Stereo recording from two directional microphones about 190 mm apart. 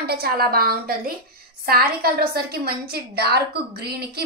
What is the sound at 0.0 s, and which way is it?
A woman's voice, 55° right (ahead or behind).